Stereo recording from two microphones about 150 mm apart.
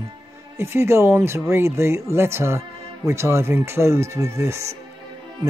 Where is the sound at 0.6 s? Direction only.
15° right (ahead or behind).